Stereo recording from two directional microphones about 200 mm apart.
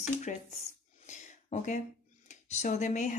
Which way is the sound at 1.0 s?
35° left (ahead or behind).